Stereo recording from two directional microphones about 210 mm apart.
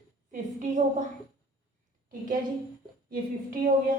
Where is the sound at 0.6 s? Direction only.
35° right (ahead or behind).